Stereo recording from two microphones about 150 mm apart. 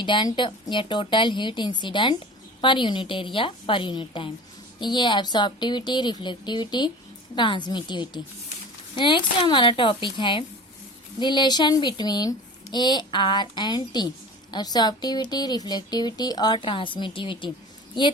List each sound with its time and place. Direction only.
0.0 s a woman's voice: 30° left (ahead or behind)